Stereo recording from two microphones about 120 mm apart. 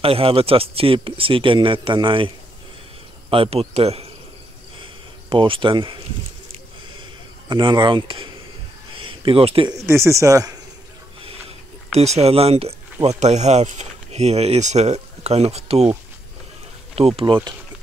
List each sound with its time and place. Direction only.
0.0 s speech: 50° right (ahead or behind)
5.3 s speech: 45° right (ahead or behind)
7.0 s a sound: 40° right (ahead or behind)
9.8 s speech: 25° right (ahead or behind)
11.9 s speech: 65° right (ahead or behind)
13.0 s speech: 70° right (ahead or behind)
16.9 s speech: 55° right (ahead or behind)